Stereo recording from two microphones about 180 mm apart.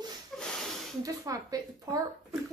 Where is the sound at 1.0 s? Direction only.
20° right (ahead or behind).